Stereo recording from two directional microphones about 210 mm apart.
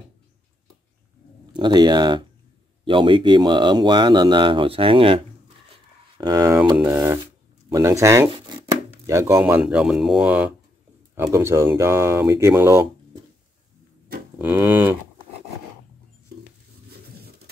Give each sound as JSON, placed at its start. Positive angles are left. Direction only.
{"t": 1.5, "sound": "speech", "side_deg": -20}
{"t": 14.4, "sound": "speech", "side_deg": -10}